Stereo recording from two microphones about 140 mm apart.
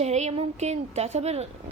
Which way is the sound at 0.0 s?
50° right (ahead or behind).